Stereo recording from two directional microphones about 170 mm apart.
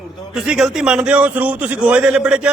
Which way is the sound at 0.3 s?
5° right (ahead or behind).